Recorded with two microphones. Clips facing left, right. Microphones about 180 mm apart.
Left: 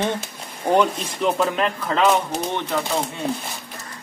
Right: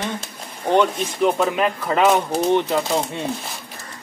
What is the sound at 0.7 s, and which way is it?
Speech, centre (ahead or behind).